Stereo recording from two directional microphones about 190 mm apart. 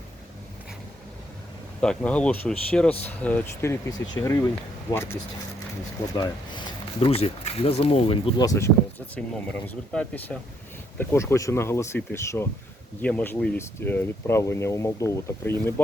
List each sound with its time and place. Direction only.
1.8 s speech: 5° left (ahead or behind)
6.1 s speech: 20° left (ahead or behind)